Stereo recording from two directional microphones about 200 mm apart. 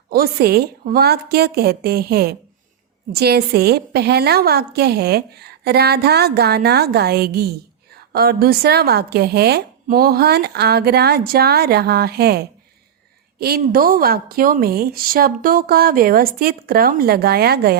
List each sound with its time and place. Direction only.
0.1 s a woman's voice: 50° right (ahead or behind)